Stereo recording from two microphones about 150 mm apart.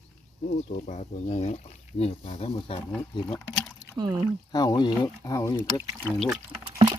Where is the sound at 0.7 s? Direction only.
50° left (ahead or behind); by 3.3 s 30° left (ahead or behind).